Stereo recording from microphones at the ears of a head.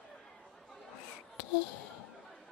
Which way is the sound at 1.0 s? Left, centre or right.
Left.